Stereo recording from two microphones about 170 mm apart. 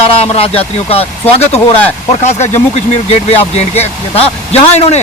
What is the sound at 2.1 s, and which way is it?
Speech, 40° left (ahead or behind).